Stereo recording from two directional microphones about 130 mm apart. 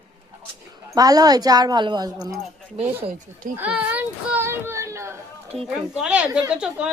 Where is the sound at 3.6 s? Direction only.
10° right (ahead or behind).